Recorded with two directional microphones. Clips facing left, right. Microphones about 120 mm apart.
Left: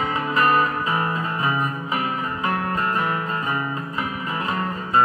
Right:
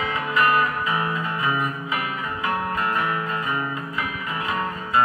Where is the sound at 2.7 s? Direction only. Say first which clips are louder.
Left 1 dB; 35° left (ahead or behind).